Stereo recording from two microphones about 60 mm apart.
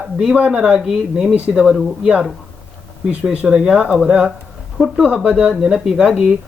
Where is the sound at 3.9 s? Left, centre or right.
Centre.